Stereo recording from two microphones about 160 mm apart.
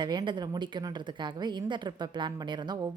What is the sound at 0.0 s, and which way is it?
A woman's voice, 30° right (ahead or behind).